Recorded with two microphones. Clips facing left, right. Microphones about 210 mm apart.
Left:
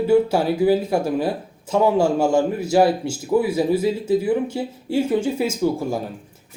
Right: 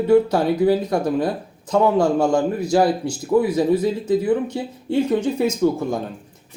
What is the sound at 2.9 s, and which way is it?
Speech, 25° left (ahead or behind).